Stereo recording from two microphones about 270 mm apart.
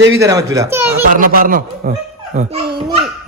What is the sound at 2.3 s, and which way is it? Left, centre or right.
Speech, right.